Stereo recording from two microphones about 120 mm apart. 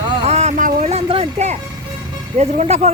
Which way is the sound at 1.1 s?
60° right (ahead or behind).